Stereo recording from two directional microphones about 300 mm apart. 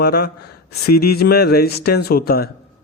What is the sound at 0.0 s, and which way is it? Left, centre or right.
A man's voice, left.